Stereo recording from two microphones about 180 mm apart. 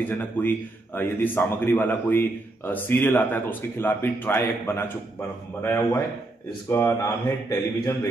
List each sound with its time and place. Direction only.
0.0 s speech: 10° left (ahead or behind)